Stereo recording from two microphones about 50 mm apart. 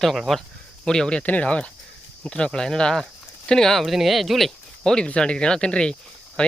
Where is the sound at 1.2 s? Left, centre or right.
Left; by 4.5 s centre.